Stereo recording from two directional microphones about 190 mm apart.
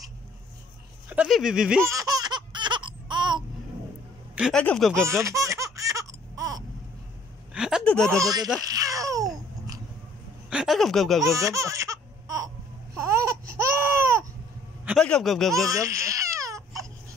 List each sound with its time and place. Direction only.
1.0 s speech: 5° right (ahead or behind)
1.9 s laughter: 20° right (ahead or behind)
4.4 s speech: 5° left (ahead or behind)
5.0 s laughter: 15° right (ahead or behind)
7.5 s speech: 5° right (ahead or behind)
8.1 s speech: 20° right (ahead or behind)
8.5 s babbling: 20° right (ahead or behind)
10.5 s speech: centre (ahead or behind)
11.3 s laughter: 15° right (ahead or behind)
13.7 s baby cry: 15° right (ahead or behind)
14.9 s speech: centre (ahead or behind)
15.6 s baby cry: 15° right (ahead or behind)